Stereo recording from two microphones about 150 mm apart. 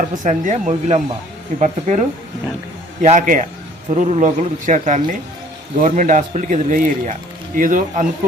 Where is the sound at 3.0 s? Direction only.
55° right (ahead or behind).